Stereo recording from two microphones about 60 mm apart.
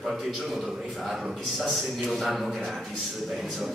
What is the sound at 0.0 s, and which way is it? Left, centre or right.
A man's voice, centre.